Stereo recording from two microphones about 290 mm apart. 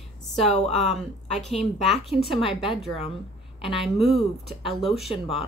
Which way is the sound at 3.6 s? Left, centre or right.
Centre.